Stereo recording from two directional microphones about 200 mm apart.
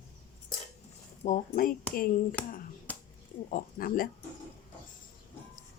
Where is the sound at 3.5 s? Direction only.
45° left (ahead or behind).